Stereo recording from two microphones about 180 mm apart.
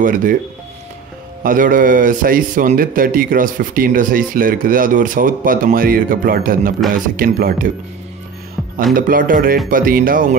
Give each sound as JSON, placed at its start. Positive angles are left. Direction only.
{"t": 0.0, "sound": "a man's voice", "side_deg": -50}
{"t": 1.4, "sound": "a man's voice", "side_deg": -50}
{"t": 8.9, "sound": "a man's voice", "side_deg": -50}